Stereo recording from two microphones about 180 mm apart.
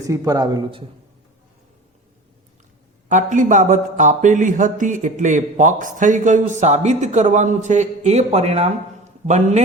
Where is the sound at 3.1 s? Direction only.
45° right (ahead or behind).